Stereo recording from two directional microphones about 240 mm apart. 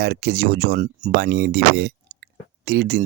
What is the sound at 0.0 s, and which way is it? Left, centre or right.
Speech, right.